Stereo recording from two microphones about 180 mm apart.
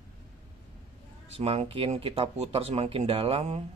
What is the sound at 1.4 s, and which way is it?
Speech, 35° right (ahead or behind).